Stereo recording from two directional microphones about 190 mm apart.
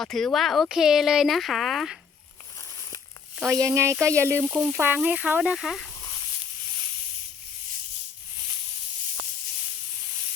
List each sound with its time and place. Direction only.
0.0 s speech: centre (ahead or behind)
2.6 s a sound: 15° left (ahead or behind)
3.5 s speech: 15° right (ahead or behind)